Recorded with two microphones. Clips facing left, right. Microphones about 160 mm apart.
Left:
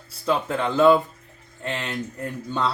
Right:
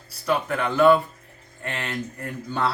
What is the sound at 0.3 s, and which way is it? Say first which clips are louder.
Speech: left 1 dB; 25° left (ahead or behind).